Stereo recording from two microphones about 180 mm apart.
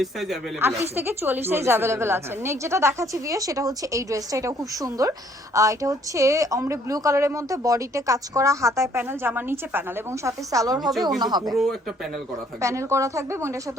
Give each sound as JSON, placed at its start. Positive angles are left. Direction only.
{"t": 0.0, "sound": "a woman's voice", "side_deg": 0}
{"t": 0.8, "sound": "a woman's voice", "side_deg": -10}
{"t": 11.5, "sound": "a woman's voice", "side_deg": 0}
{"t": 12.6, "sound": "a woman's voice", "side_deg": -15}